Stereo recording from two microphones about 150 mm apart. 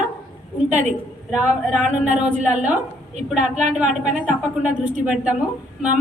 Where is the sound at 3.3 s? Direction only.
50° right (ahead or behind).